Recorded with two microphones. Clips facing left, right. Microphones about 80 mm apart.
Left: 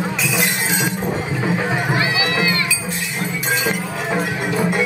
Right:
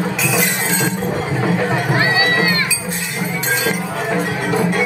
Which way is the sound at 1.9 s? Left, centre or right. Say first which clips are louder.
Right 3 dB; right.